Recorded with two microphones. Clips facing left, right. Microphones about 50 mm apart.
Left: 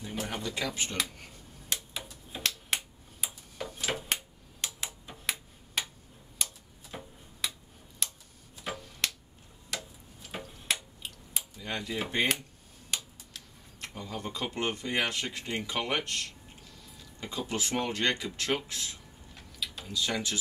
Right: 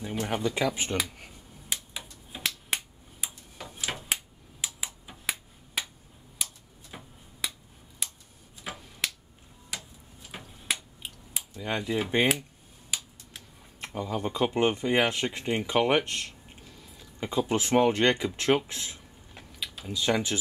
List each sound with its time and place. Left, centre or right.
0.1 s a sound: centre
0.4 s speech: centre
1.1 s finger snapping: centre
6.3 s tick-tock: centre
8.0 s a sound: centre
8.7 s tick-tock: centre
9.0 s finger snapping: centre
9.7 s tick-tock: centre
11.6 s speech: centre
12.9 s a sound: centre
13.9 s speech: centre
17.5 s speech: right